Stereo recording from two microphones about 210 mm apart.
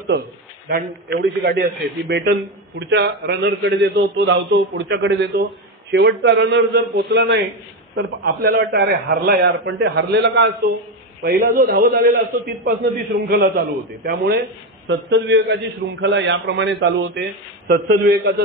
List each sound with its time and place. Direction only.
0.7 s a man's voice: 45° right (ahead or behind)
11.2 s a man's voice: 45° right (ahead or behind)
14.9 s a man's voice: 60° right (ahead or behind)